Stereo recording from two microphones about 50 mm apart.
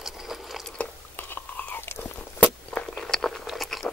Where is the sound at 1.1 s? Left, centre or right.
Left.